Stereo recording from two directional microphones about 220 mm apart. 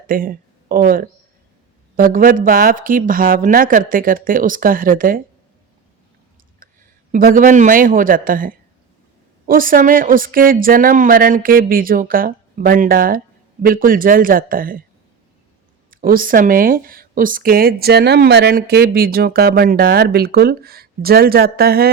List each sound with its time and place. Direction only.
0.1 s speech: 40° right (ahead or behind)
6.6 s a sound: 40° right (ahead or behind)
7.1 s speech: 40° right (ahead or behind)
15.9 s speech: 40° right (ahead or behind)